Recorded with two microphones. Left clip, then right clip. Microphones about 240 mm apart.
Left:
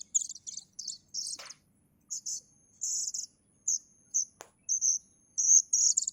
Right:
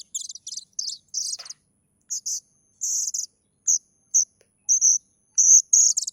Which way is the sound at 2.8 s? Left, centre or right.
Right.